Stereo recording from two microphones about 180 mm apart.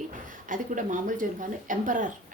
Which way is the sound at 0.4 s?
45° right (ahead or behind).